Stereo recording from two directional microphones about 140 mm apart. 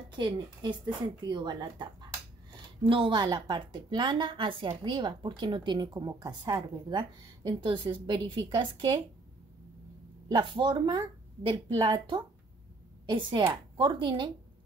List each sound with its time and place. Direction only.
0.2 s a woman's voice: 35° right (ahead or behind)
10.2 s a woman's voice: 35° right (ahead or behind)